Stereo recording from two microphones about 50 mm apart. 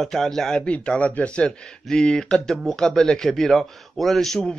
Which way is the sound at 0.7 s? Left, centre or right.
Left.